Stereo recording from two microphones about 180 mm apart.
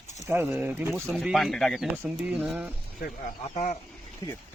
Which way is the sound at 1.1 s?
Centre (ahead or behind).